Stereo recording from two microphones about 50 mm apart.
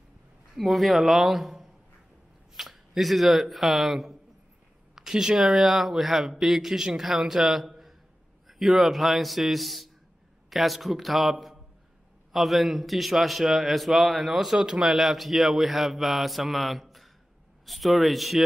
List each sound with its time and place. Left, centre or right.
0.6 s a man's voice: centre